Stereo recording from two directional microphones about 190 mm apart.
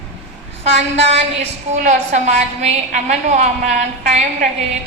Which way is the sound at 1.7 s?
40° right (ahead or behind).